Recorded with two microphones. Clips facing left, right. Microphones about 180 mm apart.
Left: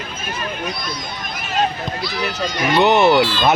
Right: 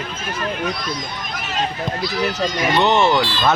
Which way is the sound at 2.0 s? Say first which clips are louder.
Right 3 dB; 45° right (ahead or behind).